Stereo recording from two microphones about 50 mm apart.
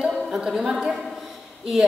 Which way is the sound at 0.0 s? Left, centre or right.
Centre.